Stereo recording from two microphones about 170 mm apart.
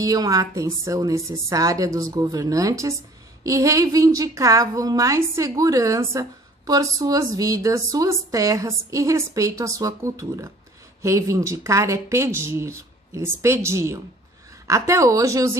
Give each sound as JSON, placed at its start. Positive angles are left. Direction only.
{"t": 0.0, "sound": "a woman's voice", "side_deg": -20}